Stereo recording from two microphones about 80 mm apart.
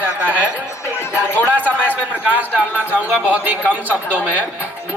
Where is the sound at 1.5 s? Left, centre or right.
Right.